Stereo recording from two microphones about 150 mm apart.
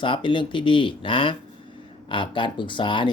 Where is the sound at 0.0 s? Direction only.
35° left (ahead or behind).